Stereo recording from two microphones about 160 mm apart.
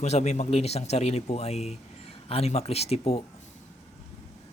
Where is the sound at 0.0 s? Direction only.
45° left (ahead or behind).